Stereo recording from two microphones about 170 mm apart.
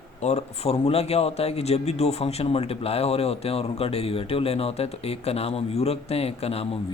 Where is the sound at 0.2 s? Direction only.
40° left (ahead or behind).